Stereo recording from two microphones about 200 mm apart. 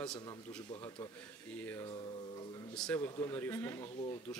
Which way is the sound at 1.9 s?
25° left (ahead or behind).